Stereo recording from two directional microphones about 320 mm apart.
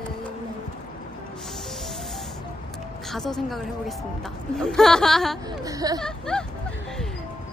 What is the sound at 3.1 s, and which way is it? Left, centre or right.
Speech, centre.